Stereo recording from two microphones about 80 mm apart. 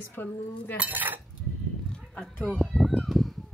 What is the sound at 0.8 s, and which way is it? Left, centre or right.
Cutlery, right.